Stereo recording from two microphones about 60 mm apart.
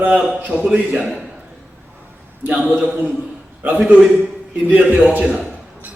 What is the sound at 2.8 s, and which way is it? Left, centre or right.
Speech, right.